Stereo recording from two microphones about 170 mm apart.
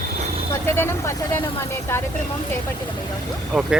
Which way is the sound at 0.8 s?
15° left (ahead or behind).